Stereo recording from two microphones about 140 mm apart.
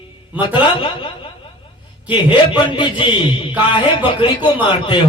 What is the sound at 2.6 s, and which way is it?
Mantra, 35° left (ahead or behind).